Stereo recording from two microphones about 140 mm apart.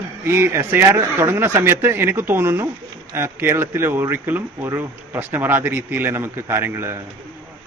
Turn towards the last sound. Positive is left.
turn(degrees=-15)  # may be behind; listen again after turning